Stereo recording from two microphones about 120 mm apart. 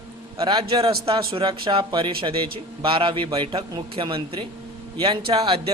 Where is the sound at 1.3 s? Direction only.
45° right (ahead or behind).